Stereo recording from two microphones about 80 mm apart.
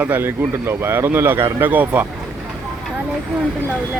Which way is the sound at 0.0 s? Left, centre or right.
Right.